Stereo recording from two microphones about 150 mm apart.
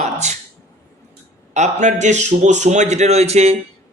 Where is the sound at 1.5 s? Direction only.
50° right (ahead or behind).